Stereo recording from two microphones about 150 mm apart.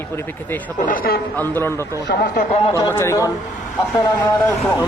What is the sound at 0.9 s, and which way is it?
Speech, 85° left.